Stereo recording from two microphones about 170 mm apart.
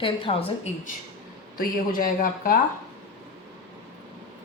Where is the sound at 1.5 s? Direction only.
55° left (ahead or behind).